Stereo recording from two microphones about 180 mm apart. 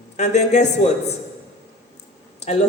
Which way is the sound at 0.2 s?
40° left (ahead or behind).